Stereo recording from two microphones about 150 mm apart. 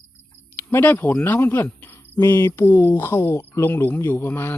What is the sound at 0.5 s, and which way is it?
Speech, 15° left (ahead or behind).